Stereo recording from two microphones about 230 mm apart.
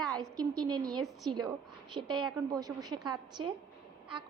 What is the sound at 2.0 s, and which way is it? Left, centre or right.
A woman's voice, centre.